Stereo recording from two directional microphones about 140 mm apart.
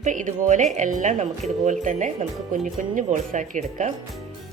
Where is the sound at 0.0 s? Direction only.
65° right (ahead or behind).